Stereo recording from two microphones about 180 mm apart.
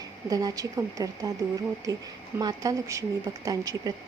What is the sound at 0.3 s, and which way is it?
A woman's voice, 20° right (ahead or behind).